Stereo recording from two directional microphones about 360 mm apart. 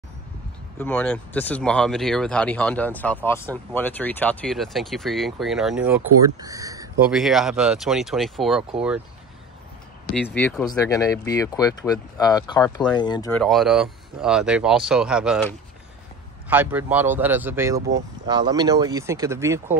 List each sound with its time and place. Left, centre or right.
0.7 s speech: centre
10.1 s speech: centre
16.4 s speech: centre